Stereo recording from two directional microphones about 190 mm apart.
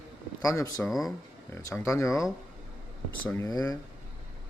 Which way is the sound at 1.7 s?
15° left (ahead or behind).